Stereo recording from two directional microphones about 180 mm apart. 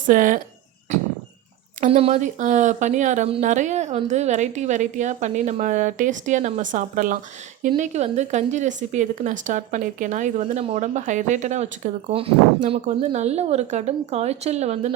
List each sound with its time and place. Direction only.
0.1 s speech: 50° right (ahead or behind)
1.8 s speech: 35° right (ahead or behind)